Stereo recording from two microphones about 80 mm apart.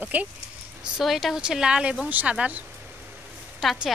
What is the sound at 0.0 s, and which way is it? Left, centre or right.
Speech, centre.